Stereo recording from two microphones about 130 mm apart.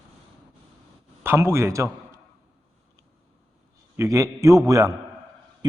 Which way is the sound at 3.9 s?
25° right (ahead or behind).